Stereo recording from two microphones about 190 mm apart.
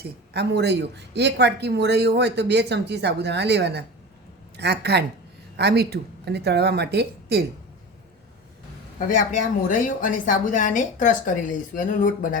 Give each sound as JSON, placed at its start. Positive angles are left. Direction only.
{"t": 0.0, "sound": "speech", "side_deg": -60}
{"t": 9.0, "sound": "a woman's voice", "side_deg": 45}